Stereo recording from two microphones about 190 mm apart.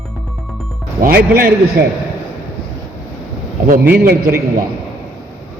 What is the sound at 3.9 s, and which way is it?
Speech, 50° right (ahead or behind).